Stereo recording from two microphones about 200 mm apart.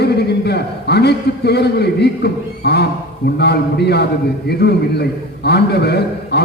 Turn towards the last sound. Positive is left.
turn(degrees=55)  # may be behind; listen again after turning